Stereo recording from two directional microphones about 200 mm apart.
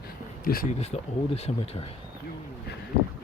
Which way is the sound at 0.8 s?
35° left (ahead or behind).